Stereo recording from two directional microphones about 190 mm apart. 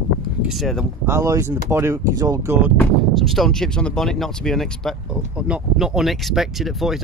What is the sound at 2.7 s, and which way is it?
Speech, centre (ahead or behind).